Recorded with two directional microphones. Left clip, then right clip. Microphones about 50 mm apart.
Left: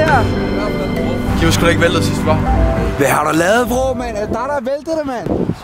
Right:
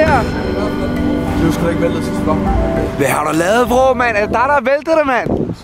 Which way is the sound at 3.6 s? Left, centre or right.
Right.